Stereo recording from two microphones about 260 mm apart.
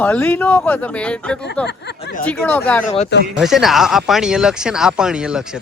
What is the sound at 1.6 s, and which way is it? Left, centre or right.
Speech, left.